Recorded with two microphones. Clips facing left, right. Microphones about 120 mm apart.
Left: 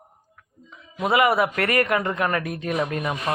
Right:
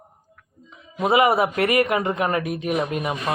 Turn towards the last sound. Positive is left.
turn(degrees=-20)  # may be behind; listen again after turning